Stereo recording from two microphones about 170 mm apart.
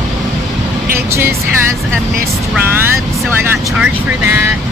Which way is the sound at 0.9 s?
15° right (ahead or behind).